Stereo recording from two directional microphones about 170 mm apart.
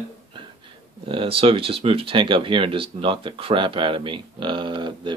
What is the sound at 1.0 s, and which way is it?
Speech, 30° right (ahead or behind).